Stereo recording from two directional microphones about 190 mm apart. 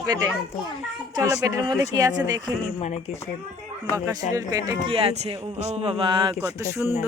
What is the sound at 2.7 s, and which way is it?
Speech, 35° left (ahead or behind).